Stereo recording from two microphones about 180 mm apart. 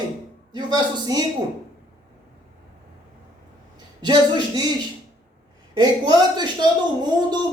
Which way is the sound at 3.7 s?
25° right (ahead or behind).